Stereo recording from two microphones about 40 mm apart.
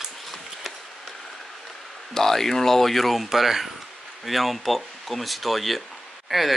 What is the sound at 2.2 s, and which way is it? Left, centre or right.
Speech, centre.